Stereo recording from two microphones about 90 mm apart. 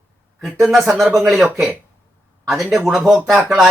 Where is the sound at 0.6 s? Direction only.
5° right (ahead or behind).